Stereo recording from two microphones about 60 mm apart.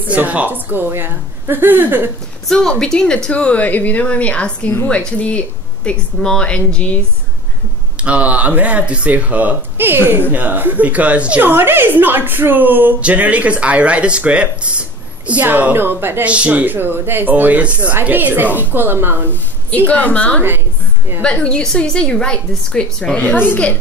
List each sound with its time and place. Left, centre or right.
0.1 s a woman's voice: right
2.4 s a woman's voice: centre
8.0 s speech: right
11.4 s a woman's voice: right
16.3 s a woman's voice: right
19.9 s a woman's voice: left
23.1 s a woman's voice: left